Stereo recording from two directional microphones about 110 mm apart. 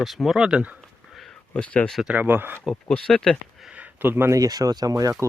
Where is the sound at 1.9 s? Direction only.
10° right (ahead or behind).